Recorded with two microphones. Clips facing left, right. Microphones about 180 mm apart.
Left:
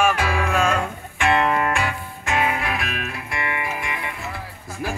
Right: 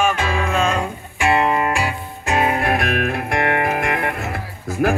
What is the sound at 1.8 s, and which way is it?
Music, 35° right (ahead or behind).